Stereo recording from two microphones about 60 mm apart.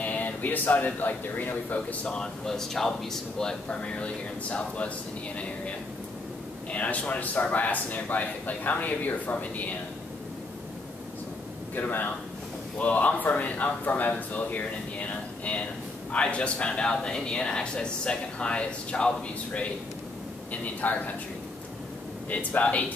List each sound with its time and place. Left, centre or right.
0.0 s speech: left
2.1 s speech: centre
6.7 s speech: left
11.7 s a man's voice: left
16.1 s speech: centre
22.3 s speech: left